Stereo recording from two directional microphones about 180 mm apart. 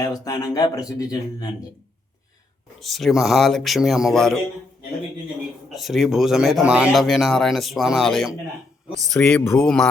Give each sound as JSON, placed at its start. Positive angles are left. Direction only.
{"t": 0.0, "sound": "speech", "side_deg": 20}
{"t": 2.8, "sound": "speech", "side_deg": 0}
{"t": 5.7, "sound": "speech", "side_deg": 0}